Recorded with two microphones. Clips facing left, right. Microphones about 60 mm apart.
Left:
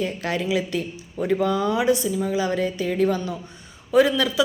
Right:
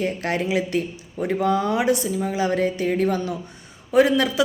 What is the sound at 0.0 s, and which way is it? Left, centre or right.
A woman's voice, right.